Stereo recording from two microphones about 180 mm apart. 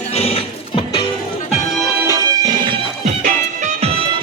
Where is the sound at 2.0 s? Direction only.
20° right (ahead or behind).